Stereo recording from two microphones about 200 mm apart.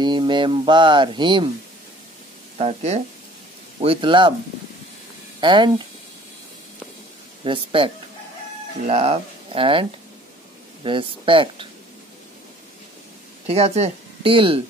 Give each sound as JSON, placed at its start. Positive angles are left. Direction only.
{"t": 0.0, "sound": "speech", "side_deg": -25}
{"t": 2.5, "sound": "speech", "side_deg": -35}
{"t": 5.4, "sound": "speech", "side_deg": -25}
{"t": 7.4, "sound": "speech", "side_deg": -25}
{"t": 13.5, "sound": "speech", "side_deg": -30}